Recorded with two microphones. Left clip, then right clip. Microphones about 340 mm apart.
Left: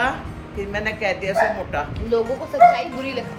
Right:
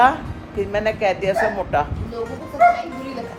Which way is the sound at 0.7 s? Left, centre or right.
Centre.